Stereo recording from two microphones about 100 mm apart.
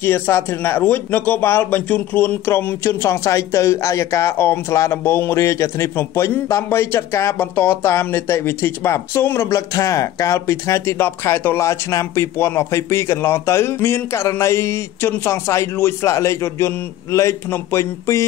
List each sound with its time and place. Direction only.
0.0 s speech: 25° left (ahead or behind)